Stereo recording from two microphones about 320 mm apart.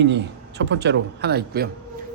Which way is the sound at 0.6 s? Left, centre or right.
Right.